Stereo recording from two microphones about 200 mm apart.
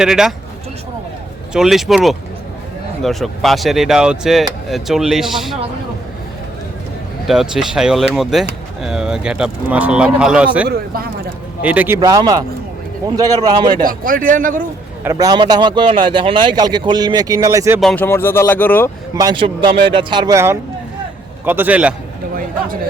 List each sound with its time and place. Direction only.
0.0 s speech: 5° right (ahead or behind)
1.5 s speech: centre (ahead or behind)
7.3 s speech: 5° right (ahead or behind)
10.7 s speech: 50° right (ahead or behind)
11.6 s a man's voice: 10° right (ahead or behind)
11.9 s speech: 20° right (ahead or behind)
13.8 s speech: 45° right (ahead or behind)
15.0 s speech: 15° right (ahead or behind)
17.7 s speech: 5° left (ahead or behind)
19.1 s a man's voice: 20° right (ahead or behind)